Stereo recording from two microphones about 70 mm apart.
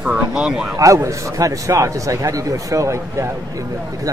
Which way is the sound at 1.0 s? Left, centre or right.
Right.